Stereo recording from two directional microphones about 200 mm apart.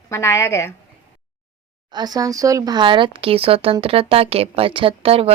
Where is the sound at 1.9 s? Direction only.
20° right (ahead or behind).